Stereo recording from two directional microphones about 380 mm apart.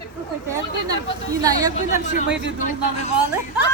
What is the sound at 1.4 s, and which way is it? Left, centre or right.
Speech, centre.